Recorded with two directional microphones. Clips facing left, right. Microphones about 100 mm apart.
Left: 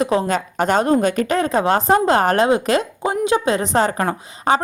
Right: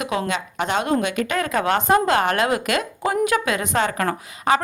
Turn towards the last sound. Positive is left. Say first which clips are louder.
# left 2 dB
turn(degrees=30)  # may be behind; listen again after turning